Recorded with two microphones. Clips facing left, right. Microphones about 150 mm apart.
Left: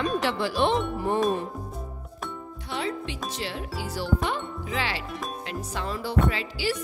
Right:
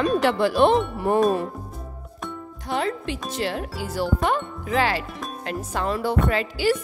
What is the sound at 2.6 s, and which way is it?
Music, 45° right (ahead or behind).